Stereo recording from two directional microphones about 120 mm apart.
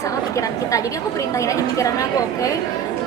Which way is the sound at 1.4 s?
25° left (ahead or behind).